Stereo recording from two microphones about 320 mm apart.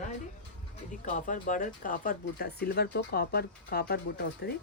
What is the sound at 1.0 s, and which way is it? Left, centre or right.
Speech, left.